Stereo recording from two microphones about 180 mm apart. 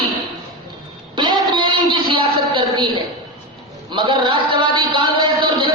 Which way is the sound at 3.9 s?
25° right (ahead or behind).